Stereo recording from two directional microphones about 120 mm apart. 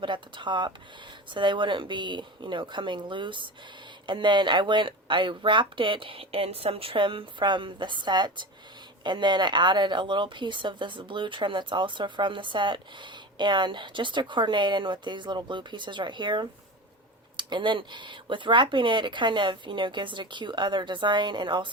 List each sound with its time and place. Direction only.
0.0 s a woman's voice: 40° right (ahead or behind)